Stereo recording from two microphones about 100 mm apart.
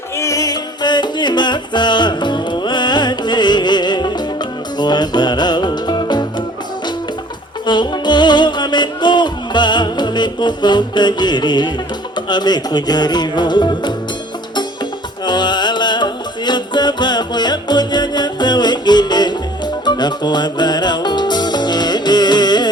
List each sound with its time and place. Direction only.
0.2 s music: 35° left (ahead or behind)
7.7 s music: 50° left (ahead or behind)
15.3 s music: 50° left (ahead or behind)